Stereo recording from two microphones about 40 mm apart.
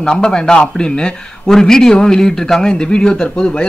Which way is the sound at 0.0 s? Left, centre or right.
Centre.